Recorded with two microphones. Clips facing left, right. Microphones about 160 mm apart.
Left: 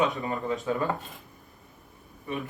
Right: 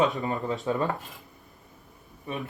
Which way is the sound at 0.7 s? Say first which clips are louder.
Right 2 dB; 30° right (ahead or behind).